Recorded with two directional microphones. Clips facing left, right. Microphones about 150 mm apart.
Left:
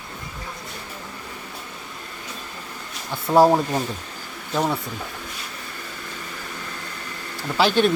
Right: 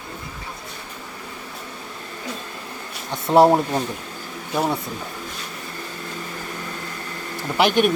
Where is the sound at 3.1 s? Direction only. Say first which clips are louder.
Right 1 dB; 20° right (ahead or behind).